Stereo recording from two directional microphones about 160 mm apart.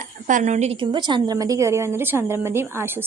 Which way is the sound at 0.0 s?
55° right (ahead or behind).